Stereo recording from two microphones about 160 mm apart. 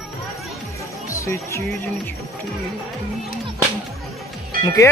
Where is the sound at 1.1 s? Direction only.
20° left (ahead or behind).